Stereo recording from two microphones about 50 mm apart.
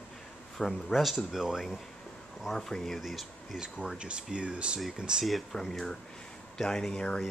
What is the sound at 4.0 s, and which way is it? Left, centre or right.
Speech, centre.